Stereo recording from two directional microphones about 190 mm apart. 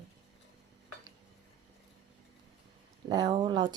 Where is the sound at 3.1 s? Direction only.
25° right (ahead or behind).